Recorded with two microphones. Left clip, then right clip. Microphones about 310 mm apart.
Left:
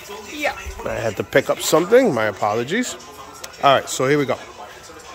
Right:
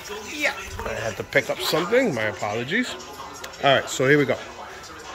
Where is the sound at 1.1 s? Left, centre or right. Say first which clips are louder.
Left 5 dB; left.